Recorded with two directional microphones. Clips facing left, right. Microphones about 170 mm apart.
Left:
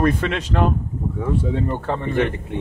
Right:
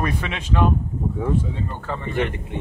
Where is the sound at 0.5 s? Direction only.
50° left (ahead or behind).